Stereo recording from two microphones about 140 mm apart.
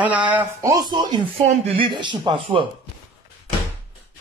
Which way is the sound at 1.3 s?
45° right (ahead or behind).